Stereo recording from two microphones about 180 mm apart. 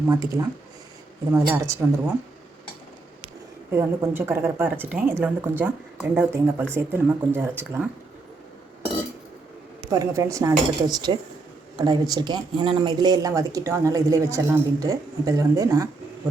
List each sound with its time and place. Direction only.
0.1 s a woman's voice: 20° right (ahead or behind)
3.7 s a woman's voice: 10° right (ahead or behind)
9.9 s a woman's voice: 15° right (ahead or behind)